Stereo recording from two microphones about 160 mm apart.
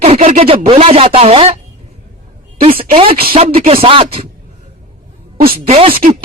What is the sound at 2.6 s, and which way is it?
Speech, 35° right (ahead or behind).